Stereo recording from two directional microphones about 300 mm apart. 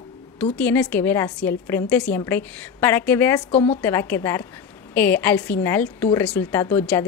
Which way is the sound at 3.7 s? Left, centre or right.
Centre.